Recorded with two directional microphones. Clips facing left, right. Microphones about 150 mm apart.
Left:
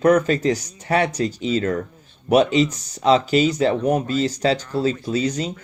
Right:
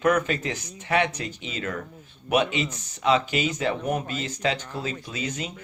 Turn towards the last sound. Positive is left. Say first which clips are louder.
# left 10 dB
turn(degrees=40)  # may be behind; listen again after turning